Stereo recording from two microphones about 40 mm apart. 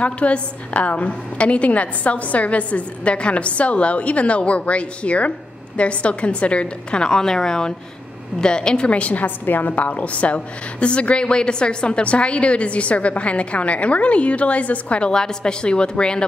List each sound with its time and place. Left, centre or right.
0.0 s a woman's voice: left
9.5 s a woman's voice: left
9.8 s a woman's voice: left
15.0 s a woman's voice: centre